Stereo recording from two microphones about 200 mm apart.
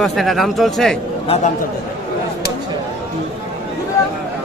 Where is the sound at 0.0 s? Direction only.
Centre (ahead or behind).